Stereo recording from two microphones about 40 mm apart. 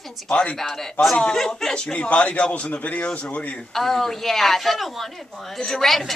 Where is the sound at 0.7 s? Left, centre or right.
Centre.